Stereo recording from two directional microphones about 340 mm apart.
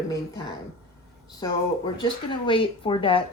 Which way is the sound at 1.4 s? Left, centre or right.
Centre.